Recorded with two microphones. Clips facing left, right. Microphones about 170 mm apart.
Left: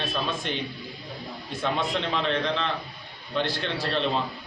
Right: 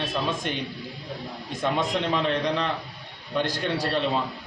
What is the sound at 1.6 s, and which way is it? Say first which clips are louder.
A man's voice: right 2 dB; 15° right (ahead or behind).